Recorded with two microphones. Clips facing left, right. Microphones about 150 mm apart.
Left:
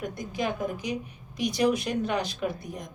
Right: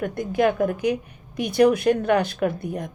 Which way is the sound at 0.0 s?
60° right (ahead or behind).